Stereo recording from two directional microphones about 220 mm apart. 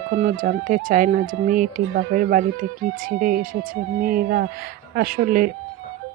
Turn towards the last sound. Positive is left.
turn(degrees=-40)  # may be behind; listen again after turning